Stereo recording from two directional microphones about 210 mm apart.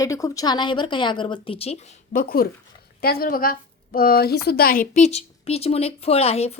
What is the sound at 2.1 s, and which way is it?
A woman's voice, 45° left (ahead or behind).